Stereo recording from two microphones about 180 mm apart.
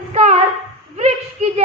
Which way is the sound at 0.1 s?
40° right (ahead or behind).